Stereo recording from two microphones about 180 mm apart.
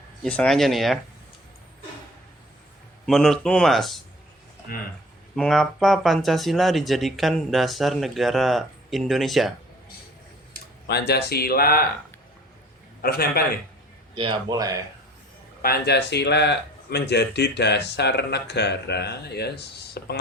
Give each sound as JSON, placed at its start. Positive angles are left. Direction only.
{"t": 0.2, "sound": "speech", "side_deg": 5}
{"t": 3.1, "sound": "speech", "side_deg": 5}
{"t": 5.4, "sound": "speech", "side_deg": 0}
{"t": 10.5, "sound": "speech", "side_deg": 65}
{"t": 13.0, "sound": "a man's voice", "side_deg": 60}
{"t": 14.2, "sound": "speech", "side_deg": -25}
{"t": 15.6, "sound": "speech", "side_deg": 65}